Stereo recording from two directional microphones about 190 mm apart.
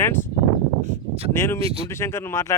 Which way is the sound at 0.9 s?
35° right (ahead or behind).